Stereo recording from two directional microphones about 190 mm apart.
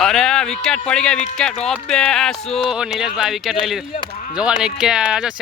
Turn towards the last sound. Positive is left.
turn(degrees=-5)  # may be behind; listen again after turning